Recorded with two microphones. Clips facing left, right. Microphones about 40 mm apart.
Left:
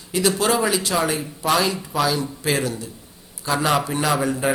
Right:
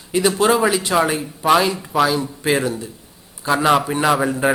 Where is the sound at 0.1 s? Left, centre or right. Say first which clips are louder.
Right 4 dB; centre.